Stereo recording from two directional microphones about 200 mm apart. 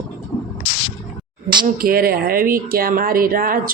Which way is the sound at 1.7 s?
45° right (ahead or behind).